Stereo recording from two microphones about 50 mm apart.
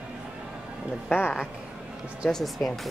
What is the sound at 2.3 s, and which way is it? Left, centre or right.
Speech, centre.